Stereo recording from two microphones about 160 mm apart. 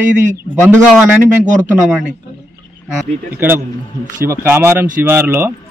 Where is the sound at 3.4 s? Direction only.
15° right (ahead or behind).